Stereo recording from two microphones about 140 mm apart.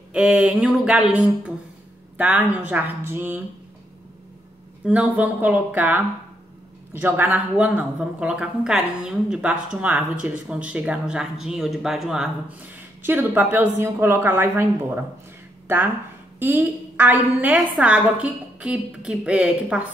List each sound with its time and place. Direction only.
0.1 s a woman's voice: 10° right (ahead or behind)
4.8 s a woman's voice: 10° right (ahead or behind)